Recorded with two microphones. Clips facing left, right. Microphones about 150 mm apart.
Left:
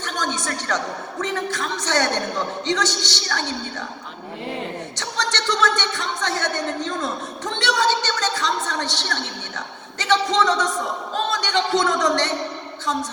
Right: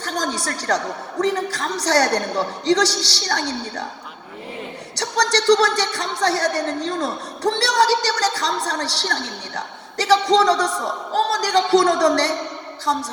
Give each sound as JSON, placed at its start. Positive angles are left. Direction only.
{"t": 0.0, "sound": "a woman's voice", "side_deg": -35}
{"t": 4.9, "sound": "a woman's voice", "side_deg": -35}
{"t": 12.8, "sound": "music", "side_deg": -35}